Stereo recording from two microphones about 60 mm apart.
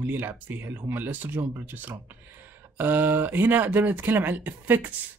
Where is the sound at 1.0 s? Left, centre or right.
Right.